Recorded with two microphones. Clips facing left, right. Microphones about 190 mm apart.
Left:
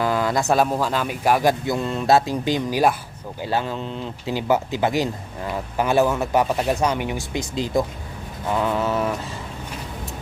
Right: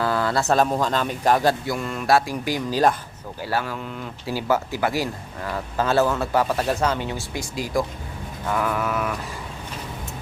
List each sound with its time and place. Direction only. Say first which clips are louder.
0.0 s speech: left 1 dB; 15° left (ahead or behind)